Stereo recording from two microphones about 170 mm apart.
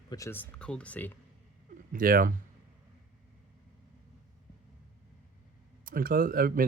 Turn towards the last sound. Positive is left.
turn(degrees=-55)  # may be behind; listen again after turning